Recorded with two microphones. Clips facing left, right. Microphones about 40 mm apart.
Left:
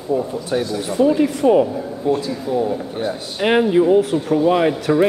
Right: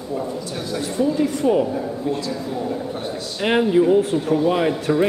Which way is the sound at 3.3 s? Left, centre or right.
Centre.